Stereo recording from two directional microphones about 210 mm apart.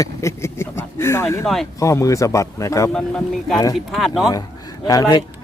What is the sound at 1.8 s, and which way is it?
Speech, 15° left (ahead or behind).